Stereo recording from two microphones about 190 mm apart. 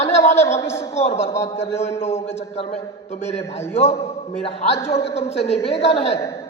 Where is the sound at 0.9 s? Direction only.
35° left (ahead or behind).